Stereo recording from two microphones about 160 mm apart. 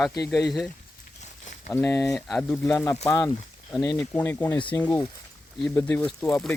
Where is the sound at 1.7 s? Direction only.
15° left (ahead or behind).